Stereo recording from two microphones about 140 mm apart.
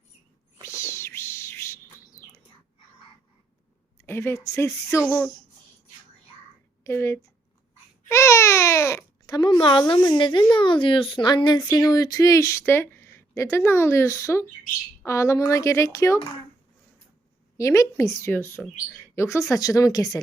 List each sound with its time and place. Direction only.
0.6 s cat: 20° left (ahead or behind)
4.0 s speech: 15° left (ahead or behind)
6.8 s speech: 20° left (ahead or behind)
8.0 s baby cry: 20° left (ahead or behind)
9.6 s a child's voice: 35° left (ahead or behind); by 16.1 s 20° left (ahead or behind)
17.6 s speech: 20° left (ahead or behind)